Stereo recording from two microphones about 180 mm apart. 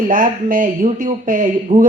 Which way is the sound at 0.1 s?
50° right (ahead or behind).